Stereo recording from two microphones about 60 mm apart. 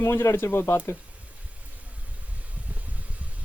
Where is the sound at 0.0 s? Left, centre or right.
Left.